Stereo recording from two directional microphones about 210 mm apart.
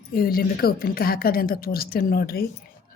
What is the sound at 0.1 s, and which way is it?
A woman's voice, 45° left (ahead or behind).